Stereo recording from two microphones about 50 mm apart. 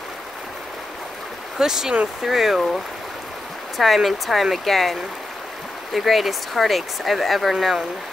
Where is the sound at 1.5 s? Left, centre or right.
Centre.